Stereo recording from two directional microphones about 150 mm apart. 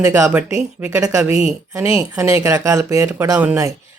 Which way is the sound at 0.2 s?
10° right (ahead or behind).